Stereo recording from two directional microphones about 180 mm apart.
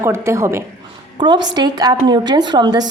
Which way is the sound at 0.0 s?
15° right (ahead or behind).